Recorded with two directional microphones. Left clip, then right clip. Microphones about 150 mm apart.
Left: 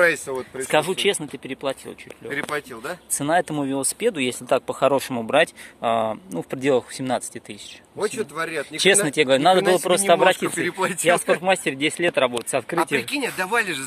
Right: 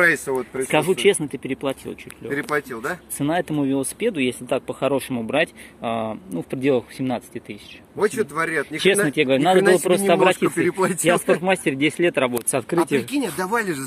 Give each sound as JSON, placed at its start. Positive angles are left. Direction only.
{"t": 0.0, "sound": "speech", "side_deg": 25}
{"t": 2.2, "sound": "speech", "side_deg": 30}
{"t": 11.1, "sound": "speech", "side_deg": 10}